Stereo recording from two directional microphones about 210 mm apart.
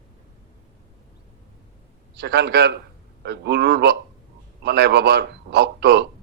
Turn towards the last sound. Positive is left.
turn(degrees=-50)  # may be behind; listen again after turning